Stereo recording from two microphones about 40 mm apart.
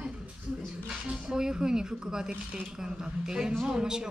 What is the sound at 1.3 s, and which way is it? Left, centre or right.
Speech, centre.